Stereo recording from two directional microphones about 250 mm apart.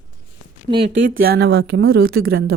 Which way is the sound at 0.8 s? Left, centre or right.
Right.